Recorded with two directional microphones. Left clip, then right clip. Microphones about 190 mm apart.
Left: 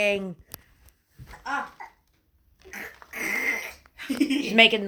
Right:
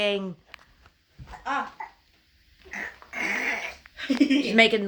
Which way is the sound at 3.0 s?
60° left (ahead or behind).